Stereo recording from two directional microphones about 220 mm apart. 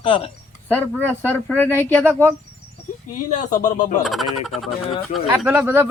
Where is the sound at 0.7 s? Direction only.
10° left (ahead or behind).